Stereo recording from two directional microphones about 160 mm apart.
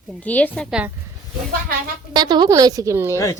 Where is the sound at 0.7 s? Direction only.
5° right (ahead or behind).